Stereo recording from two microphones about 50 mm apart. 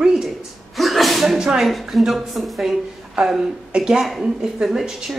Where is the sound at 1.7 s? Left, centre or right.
Centre.